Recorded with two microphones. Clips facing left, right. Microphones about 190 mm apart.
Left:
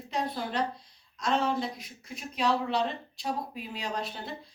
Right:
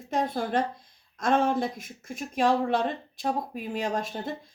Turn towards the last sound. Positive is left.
turn(degrees=-45)  # may be behind; listen again after turning